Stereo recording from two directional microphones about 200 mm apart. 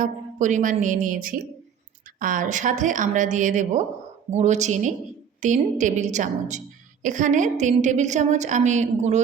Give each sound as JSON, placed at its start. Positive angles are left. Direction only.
{"t": 0.0, "sound": "a woman's voice", "side_deg": -40}